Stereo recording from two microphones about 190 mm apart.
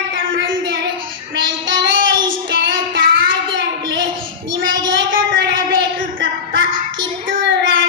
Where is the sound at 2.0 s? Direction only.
75° right (ahead or behind).